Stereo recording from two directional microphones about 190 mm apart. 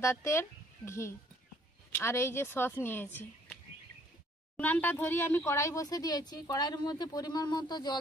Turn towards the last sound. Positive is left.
turn(degrees=20)  # may be behind; listen again after turning